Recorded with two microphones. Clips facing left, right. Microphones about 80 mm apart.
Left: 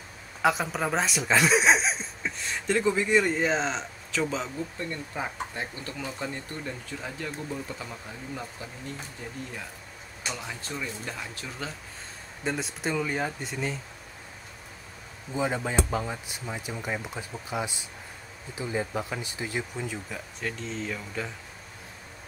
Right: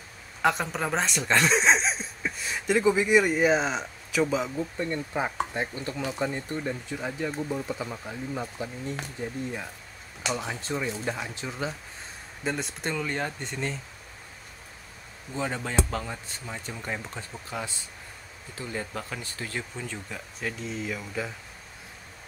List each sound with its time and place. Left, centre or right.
0.4 s speech: centre
5.1 s speech: right
12.4 s speech: centre
15.3 s speech: centre
20.1 s speech: centre